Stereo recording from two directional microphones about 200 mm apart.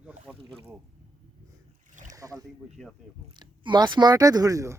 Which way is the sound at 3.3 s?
20° right (ahead or behind).